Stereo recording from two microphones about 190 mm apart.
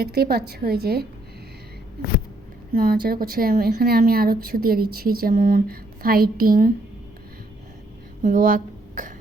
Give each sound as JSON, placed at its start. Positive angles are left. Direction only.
{"t": 0.0, "sound": "a woman's voice", "side_deg": -55}
{"t": 2.7, "sound": "speech", "side_deg": -50}
{"t": 8.2, "sound": "a sound", "side_deg": -45}